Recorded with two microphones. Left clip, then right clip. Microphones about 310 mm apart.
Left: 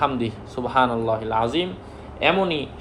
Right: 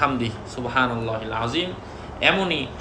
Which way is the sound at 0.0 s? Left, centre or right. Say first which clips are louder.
Even; centre.